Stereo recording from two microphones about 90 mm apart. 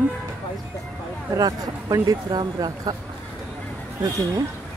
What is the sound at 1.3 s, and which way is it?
Speech, 45° right (ahead or behind).